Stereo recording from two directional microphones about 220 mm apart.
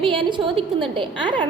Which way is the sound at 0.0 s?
20° right (ahead or behind).